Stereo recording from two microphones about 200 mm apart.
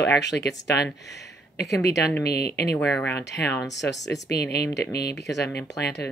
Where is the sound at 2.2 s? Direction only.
55° left (ahead or behind).